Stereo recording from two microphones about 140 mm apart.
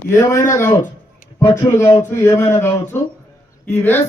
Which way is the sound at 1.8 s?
20° left (ahead or behind).